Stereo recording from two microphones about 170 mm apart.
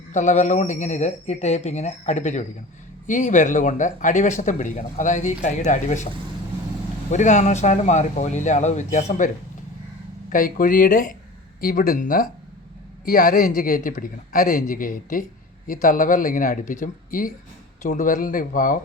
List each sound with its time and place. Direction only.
0.1 s speech: 45° left (ahead or behind)
7.1 s speech: 45° left (ahead or behind)